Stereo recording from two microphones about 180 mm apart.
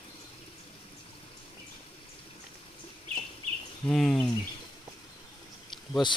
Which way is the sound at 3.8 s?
5° left (ahead or behind).